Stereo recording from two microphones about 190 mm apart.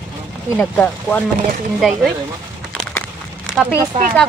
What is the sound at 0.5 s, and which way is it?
Speech, 5° left (ahead or behind).